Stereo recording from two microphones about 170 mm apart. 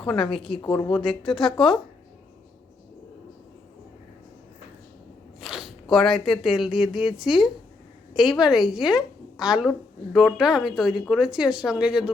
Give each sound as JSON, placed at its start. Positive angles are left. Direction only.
{"t": 0.0, "sound": "a woman's voice", "side_deg": 0}
{"t": 0.6, "sound": "speech", "side_deg": 15}
{"t": 0.9, "sound": "a woman's voice", "side_deg": 5}
{"t": 5.4, "sound": "a woman's voice", "side_deg": 0}